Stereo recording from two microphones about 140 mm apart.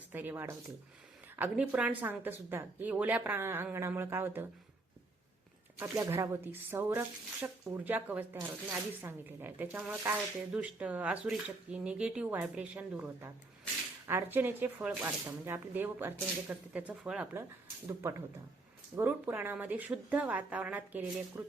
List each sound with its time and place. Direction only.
0.1 s speech: 15° right (ahead or behind)
5.7 s speech: 20° right (ahead or behind)
17.8 s speech: 20° right (ahead or behind)